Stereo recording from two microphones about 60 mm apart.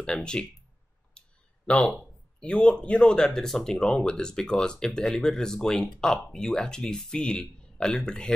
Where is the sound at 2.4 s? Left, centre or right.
Centre.